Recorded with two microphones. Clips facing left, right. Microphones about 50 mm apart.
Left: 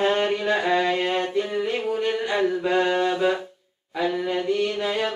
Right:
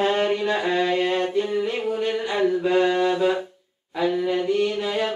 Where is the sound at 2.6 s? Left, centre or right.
Centre.